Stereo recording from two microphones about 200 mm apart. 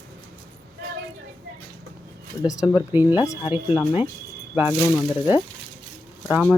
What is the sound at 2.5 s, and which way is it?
Speech, 15° left (ahead or behind).